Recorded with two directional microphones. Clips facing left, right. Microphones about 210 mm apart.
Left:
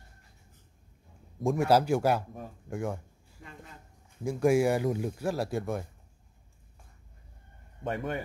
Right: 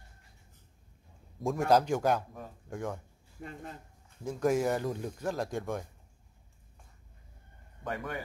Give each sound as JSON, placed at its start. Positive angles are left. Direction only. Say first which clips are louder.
{"t": 1.5, "sound": "speech", "louder": "left 2 dB", "side_deg": 5}
{"t": 4.2, "sound": "speech", "louder": "left 4 dB", "side_deg": 10}
{"t": 7.8, "sound": "a man's voice", "louder": "left 4 dB", "side_deg": 25}